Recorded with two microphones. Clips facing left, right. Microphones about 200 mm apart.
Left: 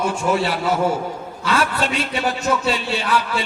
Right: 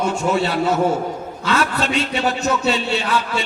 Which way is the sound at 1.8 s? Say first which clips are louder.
Right 2 dB; 25° right (ahead or behind).